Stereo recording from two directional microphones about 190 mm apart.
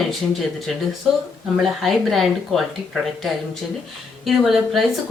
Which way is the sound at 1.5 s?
Centre (ahead or behind).